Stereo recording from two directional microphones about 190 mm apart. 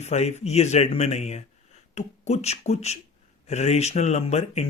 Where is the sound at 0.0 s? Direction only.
35° left (ahead or behind).